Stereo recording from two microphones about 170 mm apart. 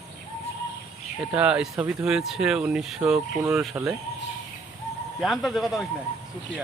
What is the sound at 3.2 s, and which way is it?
Speech, 15° right (ahead or behind).